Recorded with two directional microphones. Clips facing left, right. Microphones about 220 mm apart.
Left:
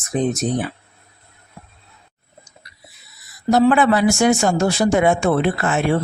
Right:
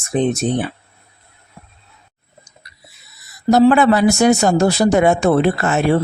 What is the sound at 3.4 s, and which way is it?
Speech, 40° right (ahead or behind).